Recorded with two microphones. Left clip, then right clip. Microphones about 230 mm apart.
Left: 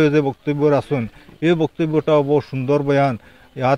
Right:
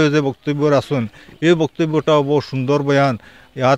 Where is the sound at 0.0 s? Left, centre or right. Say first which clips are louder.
Even; right.